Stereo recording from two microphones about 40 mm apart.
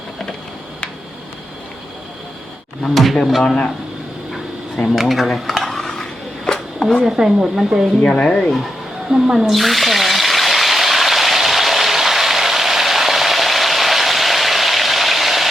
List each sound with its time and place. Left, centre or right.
2.9 s speech: centre
3.4 s a man's voice: centre
4.9 s stir: centre
7.2 s speech: centre
8.0 s speech: left
9.0 s speech: centre
9.6 s water: centre